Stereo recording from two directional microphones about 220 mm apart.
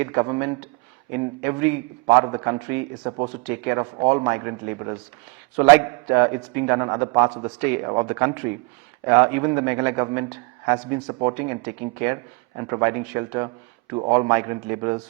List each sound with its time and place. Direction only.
0.0 s a man's voice: 15° right (ahead or behind)